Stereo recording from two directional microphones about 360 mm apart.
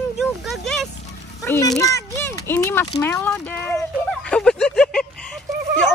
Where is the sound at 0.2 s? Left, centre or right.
Centre.